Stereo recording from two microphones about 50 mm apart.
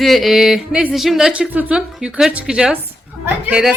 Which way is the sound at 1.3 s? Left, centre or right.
Right.